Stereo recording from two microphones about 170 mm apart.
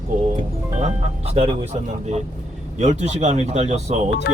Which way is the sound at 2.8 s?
40° right (ahead or behind).